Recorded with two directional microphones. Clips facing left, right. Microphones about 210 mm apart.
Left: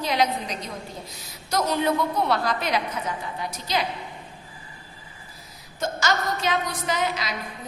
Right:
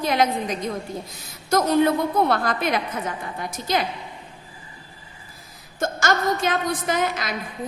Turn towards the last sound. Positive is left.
turn(degrees=-50)  # may be behind; listen again after turning